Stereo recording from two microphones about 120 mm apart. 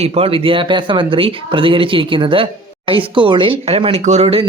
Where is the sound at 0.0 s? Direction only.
55° right (ahead or behind).